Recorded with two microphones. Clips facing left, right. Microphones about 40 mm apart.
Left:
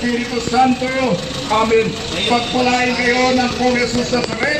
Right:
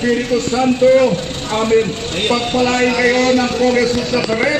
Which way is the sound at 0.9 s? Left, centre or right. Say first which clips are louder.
Right 5 dB; centre.